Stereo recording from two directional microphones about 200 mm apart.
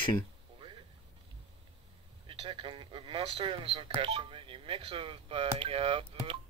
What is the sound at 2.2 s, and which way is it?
A man's voice, 25° right (ahead or behind).